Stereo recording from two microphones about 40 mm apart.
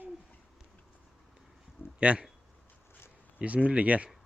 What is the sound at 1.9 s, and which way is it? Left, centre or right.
Speech, right.